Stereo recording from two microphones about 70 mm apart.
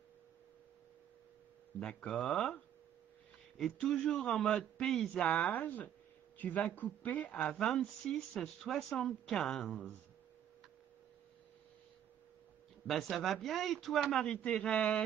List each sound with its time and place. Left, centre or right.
2.0 s a woman's voice: centre
5.2 s speech: centre
7.5 s a woman's voice: centre
12.8 s speech: centre